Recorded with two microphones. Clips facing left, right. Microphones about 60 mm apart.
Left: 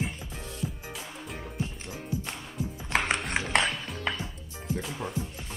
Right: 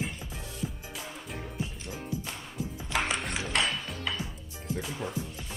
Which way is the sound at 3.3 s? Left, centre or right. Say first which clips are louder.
Left 3 dB; left.